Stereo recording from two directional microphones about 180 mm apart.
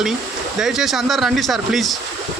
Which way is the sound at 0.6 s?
Centre (ahead or behind).